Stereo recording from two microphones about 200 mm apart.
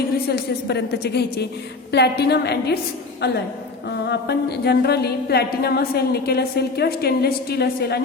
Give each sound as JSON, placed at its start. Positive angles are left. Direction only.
{"t": 0.3, "sound": "a woman's voice", "side_deg": 55}